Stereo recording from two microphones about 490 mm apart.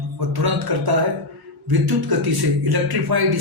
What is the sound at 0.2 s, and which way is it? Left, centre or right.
A man's voice, right.